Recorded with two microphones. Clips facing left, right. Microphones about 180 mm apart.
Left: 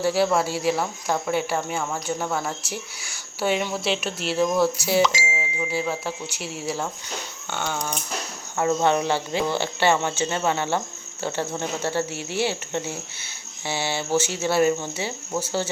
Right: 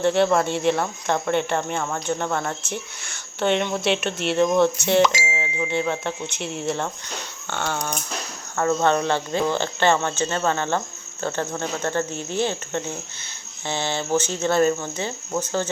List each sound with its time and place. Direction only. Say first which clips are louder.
0.0 s speech: right 2 dB; 5° left (ahead or behind)
8.5 s speech: right 1 dB; 15° left (ahead or behind)